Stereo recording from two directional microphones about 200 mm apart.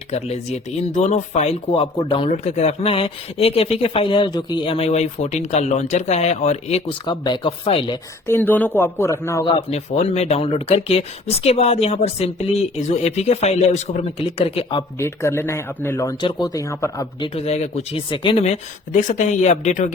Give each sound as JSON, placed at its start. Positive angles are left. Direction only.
{"t": 0.1, "sound": "speech", "side_deg": 35}
{"t": 8.3, "sound": "a man's voice", "side_deg": 10}
{"t": 9.6, "sound": "speech", "side_deg": 30}